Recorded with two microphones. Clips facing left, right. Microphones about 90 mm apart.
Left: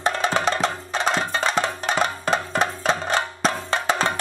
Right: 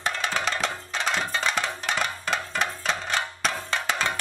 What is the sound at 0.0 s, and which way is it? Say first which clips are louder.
Music: left 6 dB; 35° left (ahead or behind).